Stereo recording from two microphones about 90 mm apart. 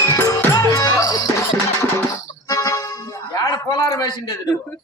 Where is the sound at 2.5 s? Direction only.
40° left (ahead or behind).